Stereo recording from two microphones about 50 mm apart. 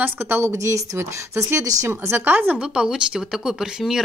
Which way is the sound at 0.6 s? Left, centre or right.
Right.